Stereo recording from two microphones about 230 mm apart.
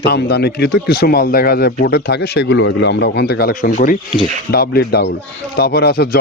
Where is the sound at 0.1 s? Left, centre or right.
Left.